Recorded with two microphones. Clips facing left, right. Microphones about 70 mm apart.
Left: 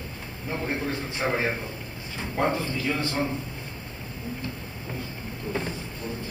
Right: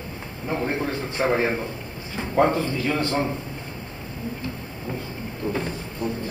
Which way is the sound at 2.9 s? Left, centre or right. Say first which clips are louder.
Right 3 dB; right.